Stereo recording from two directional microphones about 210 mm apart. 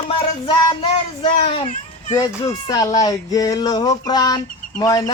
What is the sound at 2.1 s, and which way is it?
Speech, 20° left (ahead or behind).